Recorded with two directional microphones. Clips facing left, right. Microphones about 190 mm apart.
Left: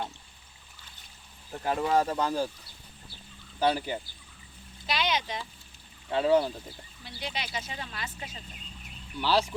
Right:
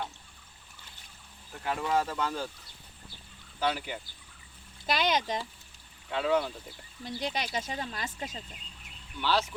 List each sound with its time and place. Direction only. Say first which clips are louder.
1.5 s speech: left 4 dB; 40° left (ahead or behind)
3.6 s speech: left 4 dB; 35° left (ahead or behind)
4.9 s speech: right 2 dB; 45° right (ahead or behind)
6.1 s speech: left 4 dB; 35° left (ahead or behind)
7.0 s speech: right 4 dB; 45° right (ahead or behind)
9.2 s speech: left 3 dB; 35° left (ahead or behind)